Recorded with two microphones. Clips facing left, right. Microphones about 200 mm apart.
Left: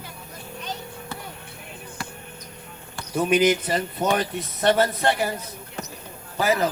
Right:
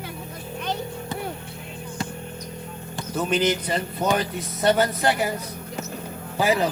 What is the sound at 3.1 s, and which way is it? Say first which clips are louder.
Speech: left 3 dB; 10° left (ahead or behind).